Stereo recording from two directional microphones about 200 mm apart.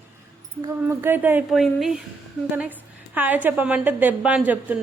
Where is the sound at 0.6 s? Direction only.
15° right (ahead or behind).